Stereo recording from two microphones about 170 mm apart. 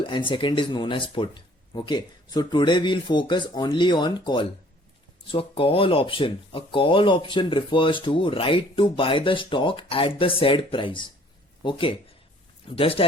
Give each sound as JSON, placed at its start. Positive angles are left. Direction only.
{"t": 0.0, "sound": "speech", "side_deg": 30}